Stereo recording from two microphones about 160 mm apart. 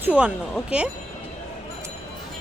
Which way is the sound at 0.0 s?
10° right (ahead or behind).